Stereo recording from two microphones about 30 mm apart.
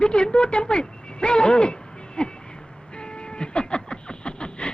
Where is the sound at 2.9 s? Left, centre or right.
Left.